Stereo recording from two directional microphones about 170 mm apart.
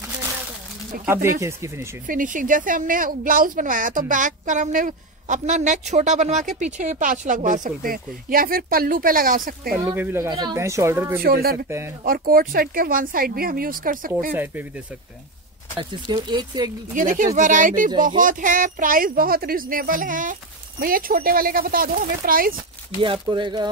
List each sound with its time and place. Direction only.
1.0 s speech: 15° right (ahead or behind)
2.0 s a woman's voice: 50° right (ahead or behind)
9.8 s speech: 15° right (ahead or behind)
11.2 s speech: 65° right (ahead or behind)
14.3 s speech: 10° right (ahead or behind)
15.8 s speech: 25° right (ahead or behind)
16.9 s a woman's voice: 50° right (ahead or behind)
23.0 s speech: 30° right (ahead or behind)